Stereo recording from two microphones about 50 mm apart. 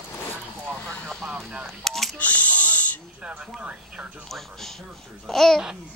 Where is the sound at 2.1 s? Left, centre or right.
Left.